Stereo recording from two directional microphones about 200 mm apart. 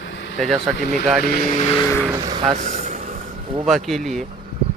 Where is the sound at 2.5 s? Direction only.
35° right (ahead or behind).